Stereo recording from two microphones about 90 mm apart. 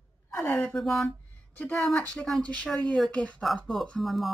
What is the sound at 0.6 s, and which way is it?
Speech, 5° left (ahead or behind).